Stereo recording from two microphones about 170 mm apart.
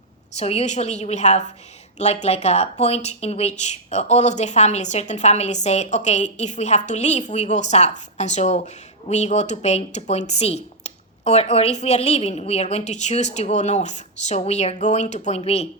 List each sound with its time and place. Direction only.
0.3 s speech: 40° left (ahead or behind)